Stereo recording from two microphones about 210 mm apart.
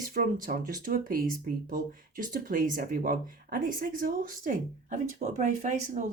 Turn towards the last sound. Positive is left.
turn(degrees=-35)  # may be behind; listen again after turning